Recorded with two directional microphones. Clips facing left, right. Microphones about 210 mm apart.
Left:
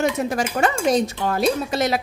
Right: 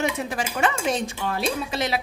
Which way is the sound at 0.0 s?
45° left (ahead or behind).